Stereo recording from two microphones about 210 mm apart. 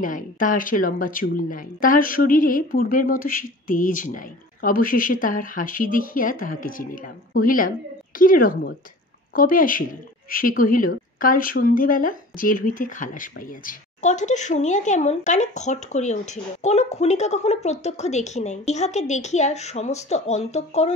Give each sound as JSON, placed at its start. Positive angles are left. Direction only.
{"t": 0.0, "sound": "speech", "side_deg": 40}